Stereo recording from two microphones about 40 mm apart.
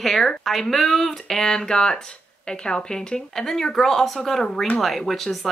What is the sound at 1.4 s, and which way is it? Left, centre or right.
Speech, centre.